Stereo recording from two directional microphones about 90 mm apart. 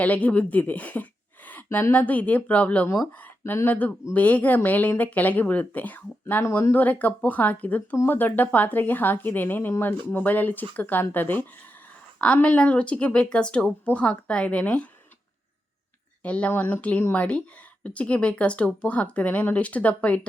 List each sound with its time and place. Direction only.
0.0 s speech: 15° left (ahead or behind)
16.2 s speech: 15° left (ahead or behind)